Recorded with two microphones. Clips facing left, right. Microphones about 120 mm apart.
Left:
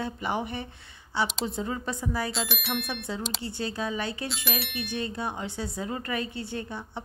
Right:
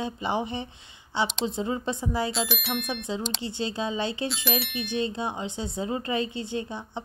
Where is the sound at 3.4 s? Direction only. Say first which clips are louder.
Right 2 dB; 20° right (ahead or behind).